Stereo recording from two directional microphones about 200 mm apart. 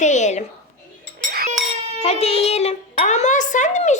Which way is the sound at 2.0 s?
30° left (ahead or behind).